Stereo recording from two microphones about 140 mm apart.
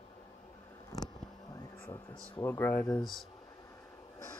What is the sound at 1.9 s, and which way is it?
Speech, 25° left (ahead or behind).